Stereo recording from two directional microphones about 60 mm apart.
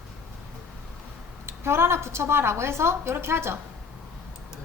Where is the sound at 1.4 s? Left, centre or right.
Right.